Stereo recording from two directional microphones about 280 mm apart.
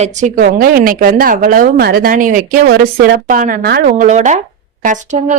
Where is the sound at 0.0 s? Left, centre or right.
Right.